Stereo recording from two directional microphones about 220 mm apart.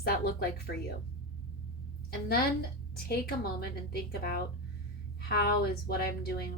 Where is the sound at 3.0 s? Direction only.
45° left (ahead or behind).